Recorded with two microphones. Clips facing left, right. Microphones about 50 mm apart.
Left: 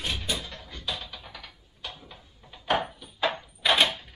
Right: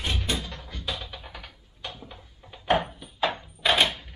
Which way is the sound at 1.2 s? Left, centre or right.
Right.